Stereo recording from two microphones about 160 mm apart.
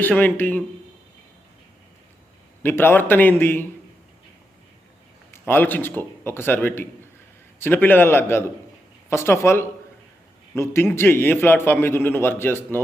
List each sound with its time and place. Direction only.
0.0 s a man's voice: 10° left (ahead or behind)
2.6 s a man's voice: 15° left (ahead or behind)
5.3 s a man's voice: 10° left (ahead or behind)